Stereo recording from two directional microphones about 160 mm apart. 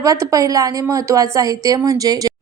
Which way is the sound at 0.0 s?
20° right (ahead or behind).